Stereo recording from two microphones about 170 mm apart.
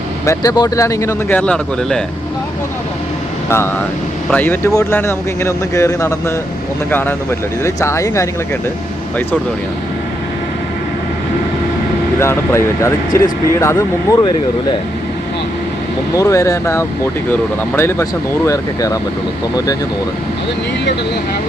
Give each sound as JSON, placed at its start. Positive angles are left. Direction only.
{"t": 0.3, "sound": "speech", "side_deg": 20}
{"t": 4.3, "sound": "speech", "side_deg": 10}
{"t": 12.2, "sound": "speech", "side_deg": 15}
{"t": 16.1, "sound": "speech", "side_deg": 15}